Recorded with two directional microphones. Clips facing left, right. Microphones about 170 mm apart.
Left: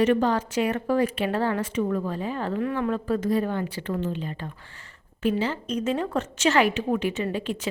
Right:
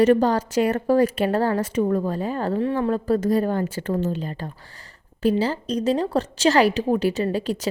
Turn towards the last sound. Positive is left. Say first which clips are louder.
# right 4 dB
turn(degrees=-40)  # may be behind; listen again after turning